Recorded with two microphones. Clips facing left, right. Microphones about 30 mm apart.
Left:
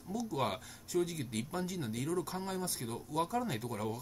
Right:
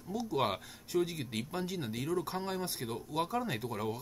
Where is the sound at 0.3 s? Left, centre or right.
Centre.